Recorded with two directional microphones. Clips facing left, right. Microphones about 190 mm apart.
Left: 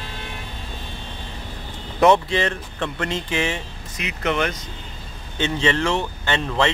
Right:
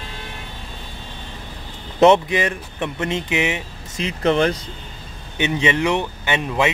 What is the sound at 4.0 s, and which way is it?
Speech, 30° right (ahead or behind).